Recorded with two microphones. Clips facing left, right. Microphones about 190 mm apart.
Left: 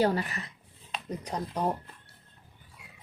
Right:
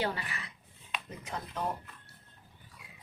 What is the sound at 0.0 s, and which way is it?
Speech, 40° left (ahead or behind).